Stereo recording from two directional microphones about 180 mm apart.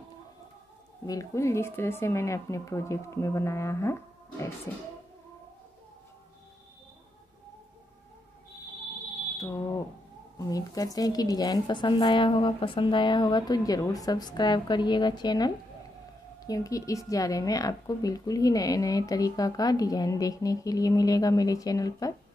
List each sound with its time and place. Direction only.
1.0 s speech: 15° left (ahead or behind)
10.4 s a woman's voice: 20° left (ahead or behind)